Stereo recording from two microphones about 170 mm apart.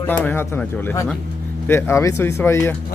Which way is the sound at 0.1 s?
10° left (ahead or behind).